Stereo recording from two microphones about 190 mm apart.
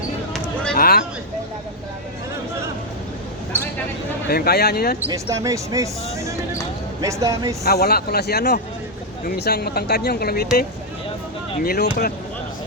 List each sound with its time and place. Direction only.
0.7 s a sound: 55° left (ahead or behind)
4.3 s speech: 55° left (ahead or behind)
5.1 s speech: 15° right (ahead or behind)
7.6 s speech: 55° left (ahead or behind)
11.6 s speech: 55° left (ahead or behind)